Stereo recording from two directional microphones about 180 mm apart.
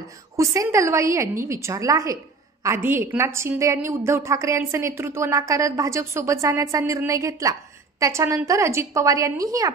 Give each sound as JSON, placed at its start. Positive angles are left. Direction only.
{"t": 0.4, "sound": "a woman's voice", "side_deg": -15}